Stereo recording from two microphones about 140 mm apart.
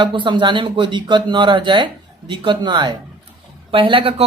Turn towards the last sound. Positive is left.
turn(degrees=-40)  # may be behind; listen again after turning